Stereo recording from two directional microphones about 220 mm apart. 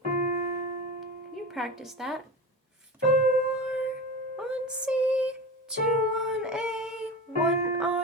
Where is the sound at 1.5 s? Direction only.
Centre (ahead or behind).